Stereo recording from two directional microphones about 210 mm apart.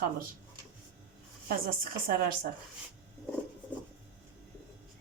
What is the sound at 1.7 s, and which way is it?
Speech, 45° right (ahead or behind).